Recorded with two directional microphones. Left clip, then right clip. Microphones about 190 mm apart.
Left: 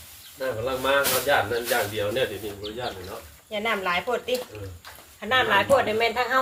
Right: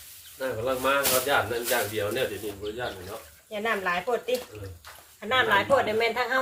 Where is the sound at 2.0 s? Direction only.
55° right (ahead or behind).